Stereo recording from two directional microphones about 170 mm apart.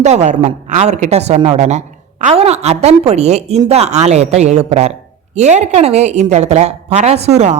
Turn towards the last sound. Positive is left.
turn(degrees=-40)  # may be behind; listen again after turning